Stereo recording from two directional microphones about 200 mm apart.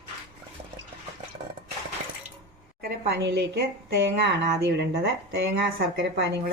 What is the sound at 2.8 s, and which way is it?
Speech, 50° right (ahead or behind).